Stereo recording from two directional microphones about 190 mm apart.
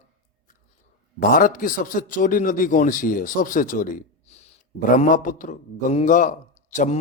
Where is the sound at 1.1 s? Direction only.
45° left (ahead or behind).